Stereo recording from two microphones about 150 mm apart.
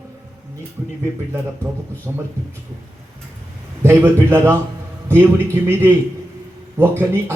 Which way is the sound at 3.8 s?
15° right (ahead or behind).